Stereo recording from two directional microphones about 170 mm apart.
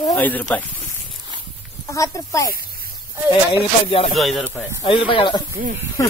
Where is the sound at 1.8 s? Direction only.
20° left (ahead or behind).